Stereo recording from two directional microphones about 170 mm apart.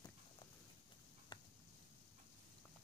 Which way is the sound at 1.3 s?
30° left (ahead or behind).